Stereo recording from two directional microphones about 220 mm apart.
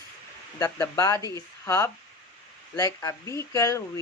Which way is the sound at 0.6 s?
15° left (ahead or behind).